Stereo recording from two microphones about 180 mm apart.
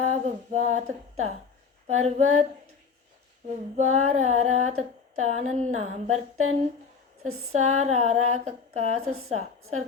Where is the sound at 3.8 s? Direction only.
40° right (ahead or behind).